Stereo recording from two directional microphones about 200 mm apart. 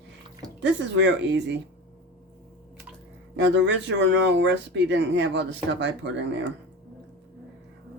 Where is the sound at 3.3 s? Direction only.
60° right (ahead or behind).